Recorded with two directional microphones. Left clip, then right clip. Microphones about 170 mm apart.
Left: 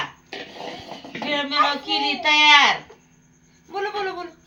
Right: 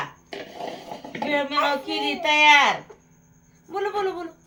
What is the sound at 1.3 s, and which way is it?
Speech, 30° right (ahead or behind).